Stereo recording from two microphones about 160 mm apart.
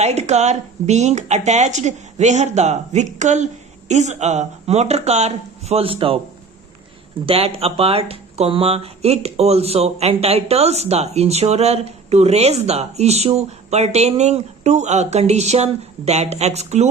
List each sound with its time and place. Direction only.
0.0 s speech: 45° right (ahead or behind)
7.3 s speech: 35° right (ahead or behind)